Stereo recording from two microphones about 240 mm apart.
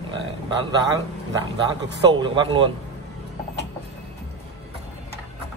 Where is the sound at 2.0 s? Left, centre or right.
Centre.